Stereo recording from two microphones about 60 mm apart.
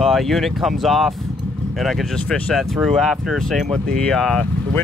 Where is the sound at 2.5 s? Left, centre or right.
Centre.